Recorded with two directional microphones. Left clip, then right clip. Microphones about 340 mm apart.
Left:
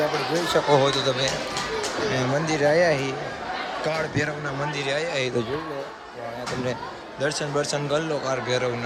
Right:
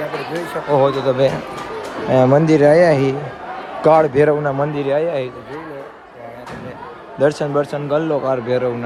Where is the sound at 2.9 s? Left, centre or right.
Centre.